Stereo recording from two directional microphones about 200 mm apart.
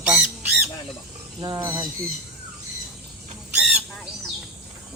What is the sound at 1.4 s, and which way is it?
Speech, 15° right (ahead or behind).